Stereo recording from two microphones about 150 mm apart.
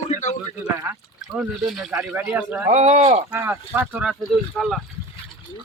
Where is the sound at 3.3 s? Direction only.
15° right (ahead or behind).